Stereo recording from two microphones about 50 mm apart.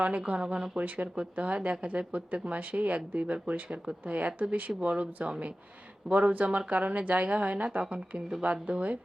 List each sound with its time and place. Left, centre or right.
0.0 s speech: right
0.8 s speech: right